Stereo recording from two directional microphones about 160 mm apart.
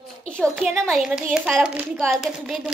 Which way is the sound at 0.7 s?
15° right (ahead or behind).